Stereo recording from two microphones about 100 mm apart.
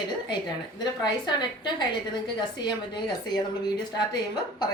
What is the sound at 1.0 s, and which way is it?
Speech, 50° left (ahead or behind).